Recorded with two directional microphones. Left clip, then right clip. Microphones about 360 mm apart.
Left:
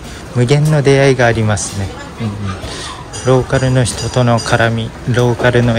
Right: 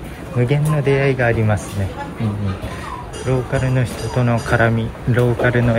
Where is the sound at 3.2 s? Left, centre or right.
Centre.